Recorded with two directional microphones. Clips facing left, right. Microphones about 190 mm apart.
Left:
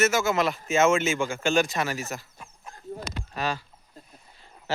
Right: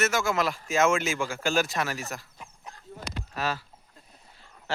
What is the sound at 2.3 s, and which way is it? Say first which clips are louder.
Chicken: even; 20° right (ahead or behind).